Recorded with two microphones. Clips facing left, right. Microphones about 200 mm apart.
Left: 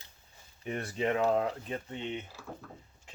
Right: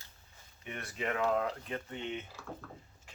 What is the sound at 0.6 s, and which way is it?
Speech, 30° left (ahead or behind).